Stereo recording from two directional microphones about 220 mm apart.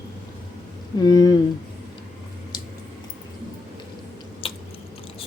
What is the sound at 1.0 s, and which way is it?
Speech, 15° left (ahead or behind).